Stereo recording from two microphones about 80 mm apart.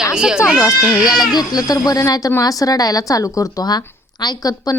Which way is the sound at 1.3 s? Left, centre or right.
Left.